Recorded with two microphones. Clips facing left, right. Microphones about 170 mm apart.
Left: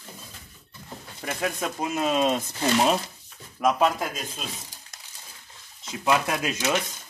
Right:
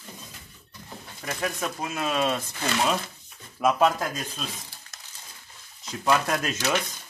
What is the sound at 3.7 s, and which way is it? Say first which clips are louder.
Speech: right 1 dB; centre (ahead or behind).